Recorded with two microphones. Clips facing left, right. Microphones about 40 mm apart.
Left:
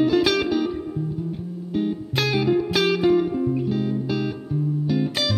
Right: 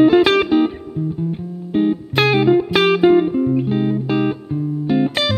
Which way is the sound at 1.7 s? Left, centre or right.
Right.